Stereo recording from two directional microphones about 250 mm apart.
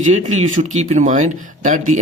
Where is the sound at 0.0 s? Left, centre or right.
Right.